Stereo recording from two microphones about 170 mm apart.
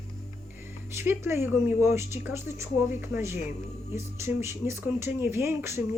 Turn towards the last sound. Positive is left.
turn(degrees=-15)  # may be behind; listen again after turning